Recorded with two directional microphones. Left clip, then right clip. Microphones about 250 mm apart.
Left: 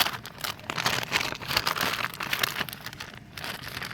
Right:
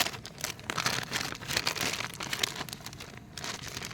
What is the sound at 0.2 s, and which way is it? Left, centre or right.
Crumpling, centre.